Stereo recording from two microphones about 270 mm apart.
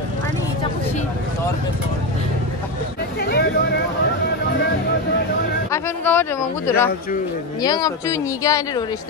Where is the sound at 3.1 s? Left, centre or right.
Left.